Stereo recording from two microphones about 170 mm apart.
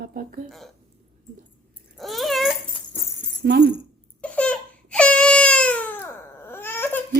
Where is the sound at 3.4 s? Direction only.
85° right.